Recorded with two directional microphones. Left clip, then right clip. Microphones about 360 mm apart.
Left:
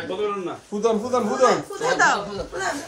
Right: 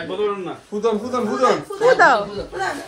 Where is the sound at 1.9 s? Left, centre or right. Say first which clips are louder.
Right 4 dB; centre.